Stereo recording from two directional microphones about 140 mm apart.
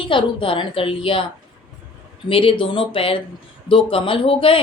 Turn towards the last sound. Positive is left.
turn(degrees=40)  # may be behind; listen again after turning